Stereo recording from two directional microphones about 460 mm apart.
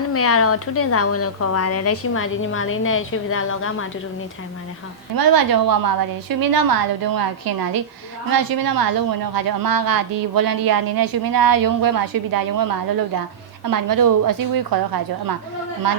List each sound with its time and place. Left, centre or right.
0.1 s a woman's voice: left
5.1 s a woman's voice: right